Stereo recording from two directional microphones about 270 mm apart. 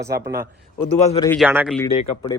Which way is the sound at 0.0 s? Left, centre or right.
Right.